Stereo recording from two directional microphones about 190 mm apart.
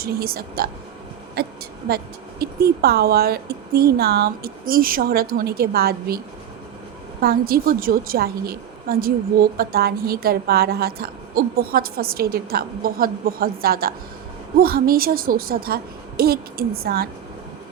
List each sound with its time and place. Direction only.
0.0 s a woman's voice: 50° right (ahead or behind)
7.2 s a woman's voice: 55° right (ahead or behind)